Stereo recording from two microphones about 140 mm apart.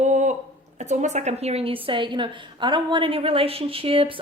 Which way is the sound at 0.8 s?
55° right (ahead or behind).